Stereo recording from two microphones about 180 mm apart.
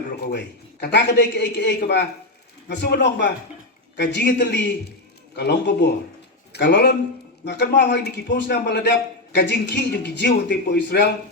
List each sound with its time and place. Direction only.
0.2 s a man's voice: 65° left (ahead or behind)